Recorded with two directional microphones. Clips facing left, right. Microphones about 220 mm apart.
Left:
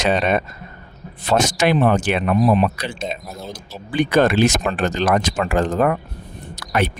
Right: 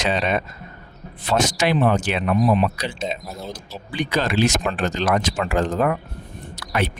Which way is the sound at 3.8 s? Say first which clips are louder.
Left 7 dB; 50° left (ahead or behind).